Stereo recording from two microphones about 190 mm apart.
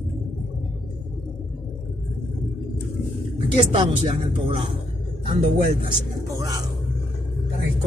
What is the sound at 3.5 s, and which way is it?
Speech, 25° right (ahead or behind).